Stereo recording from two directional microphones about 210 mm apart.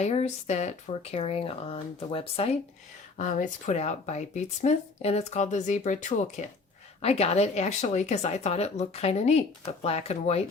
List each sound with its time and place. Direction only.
0.0 s speech: 30° left (ahead or behind)